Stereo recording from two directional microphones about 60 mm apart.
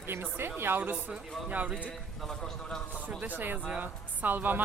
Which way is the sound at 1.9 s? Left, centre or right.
Centre.